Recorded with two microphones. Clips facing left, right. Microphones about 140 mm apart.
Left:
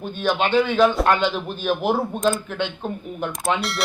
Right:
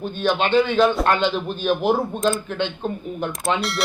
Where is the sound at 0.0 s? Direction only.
10° left (ahead or behind).